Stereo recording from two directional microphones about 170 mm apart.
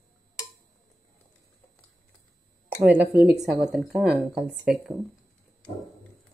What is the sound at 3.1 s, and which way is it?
Speech, centre (ahead or behind).